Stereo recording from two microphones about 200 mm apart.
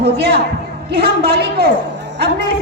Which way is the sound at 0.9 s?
55° right (ahead or behind).